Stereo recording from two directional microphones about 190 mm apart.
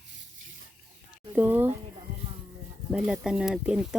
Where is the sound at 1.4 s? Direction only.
10° right (ahead or behind).